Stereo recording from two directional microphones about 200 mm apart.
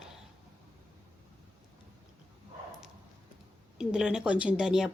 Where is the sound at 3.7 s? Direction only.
5° right (ahead or behind).